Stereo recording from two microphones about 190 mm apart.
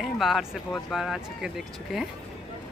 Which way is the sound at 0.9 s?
Centre (ahead or behind).